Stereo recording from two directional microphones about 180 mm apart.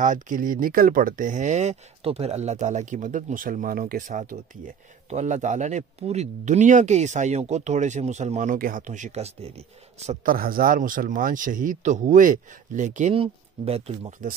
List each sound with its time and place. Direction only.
0.0 s speech: 45° right (ahead or behind)
10.3 s speech: 55° right (ahead or behind); by 14.1 s 35° right (ahead or behind)